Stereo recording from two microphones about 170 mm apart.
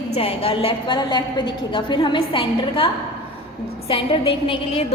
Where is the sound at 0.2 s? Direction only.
35° left (ahead or behind).